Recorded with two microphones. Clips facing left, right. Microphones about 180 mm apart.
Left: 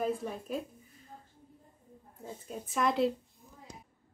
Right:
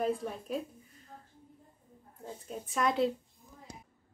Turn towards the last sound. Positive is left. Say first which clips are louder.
# even
turn(degrees=0)  # may be behind; listen again after turning